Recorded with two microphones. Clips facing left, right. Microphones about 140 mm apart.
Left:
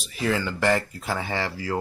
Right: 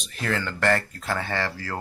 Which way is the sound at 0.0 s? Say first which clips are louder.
Left 3 dB; 5° left (ahead or behind).